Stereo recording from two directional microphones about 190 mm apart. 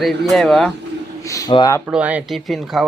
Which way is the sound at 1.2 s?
15° left (ahead or behind).